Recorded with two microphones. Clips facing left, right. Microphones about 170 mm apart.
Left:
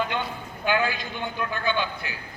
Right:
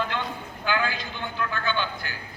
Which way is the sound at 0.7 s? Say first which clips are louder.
Left 3 dB; 20° left (ahead or behind).